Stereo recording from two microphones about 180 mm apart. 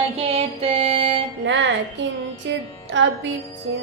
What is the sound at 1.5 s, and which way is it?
Female singing, 90° right.